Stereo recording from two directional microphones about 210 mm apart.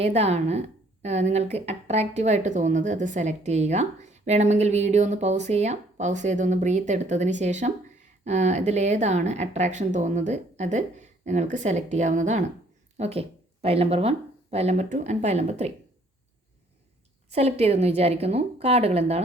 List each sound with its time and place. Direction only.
0.0 s speech: 30° right (ahead or behind)
17.2 s a woman's voice: 30° right (ahead or behind)